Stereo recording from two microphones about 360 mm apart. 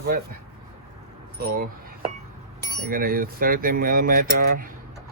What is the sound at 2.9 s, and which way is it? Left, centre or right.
Speech, right.